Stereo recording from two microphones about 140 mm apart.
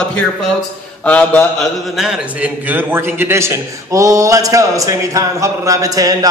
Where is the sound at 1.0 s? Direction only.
10° left (ahead or behind).